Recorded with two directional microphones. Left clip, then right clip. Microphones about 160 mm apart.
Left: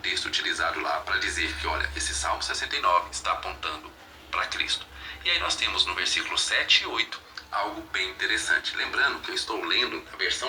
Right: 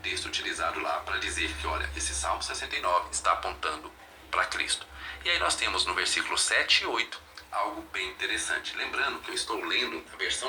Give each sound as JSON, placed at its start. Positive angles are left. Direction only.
{"t": 0.0, "sound": "speech", "side_deg": 0}
{"t": 3.2, "sound": "a man's voice", "side_deg": -30}
{"t": 7.1, "sound": "music", "side_deg": -15}
{"t": 7.9, "sound": "speech", "side_deg": 0}